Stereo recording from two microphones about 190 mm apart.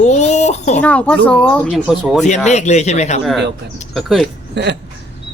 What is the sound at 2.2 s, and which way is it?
Speech, 35° left (ahead or behind).